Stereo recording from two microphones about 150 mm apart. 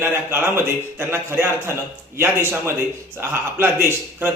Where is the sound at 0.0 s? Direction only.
15° right (ahead or behind).